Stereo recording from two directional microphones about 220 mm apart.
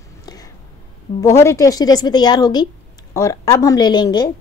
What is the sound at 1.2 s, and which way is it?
A woman's voice, 10° left (ahead or behind).